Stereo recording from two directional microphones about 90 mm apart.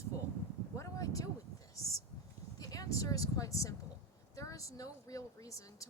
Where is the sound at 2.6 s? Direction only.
40° left (ahead or behind).